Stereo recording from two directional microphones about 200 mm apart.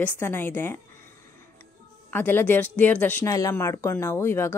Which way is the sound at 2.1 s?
10° left (ahead or behind).